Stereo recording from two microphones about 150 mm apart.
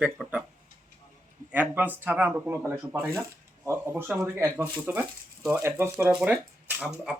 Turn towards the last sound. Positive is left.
turn(degrees=-10)  # may be behind; listen again after turning